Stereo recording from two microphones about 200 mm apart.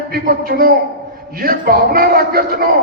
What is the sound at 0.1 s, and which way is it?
A man's voice, 50° right (ahead or behind).